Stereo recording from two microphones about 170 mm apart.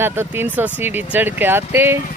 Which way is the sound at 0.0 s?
15° right (ahead or behind).